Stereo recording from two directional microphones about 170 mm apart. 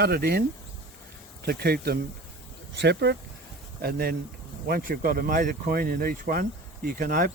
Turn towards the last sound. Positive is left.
turn(degrees=-55)  # may be behind; listen again after turning